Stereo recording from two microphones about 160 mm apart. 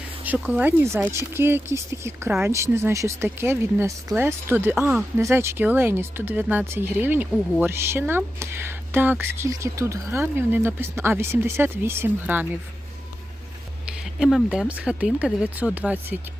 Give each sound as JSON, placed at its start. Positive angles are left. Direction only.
{"t": 0.3, "sound": "speech", "side_deg": -10}
{"t": 13.9, "sound": "speech", "side_deg": -5}